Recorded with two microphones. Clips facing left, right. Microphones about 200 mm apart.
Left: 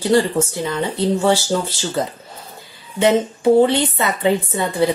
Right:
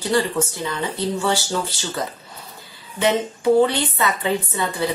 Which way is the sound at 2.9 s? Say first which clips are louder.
Left 4 dB; 25° left (ahead or behind).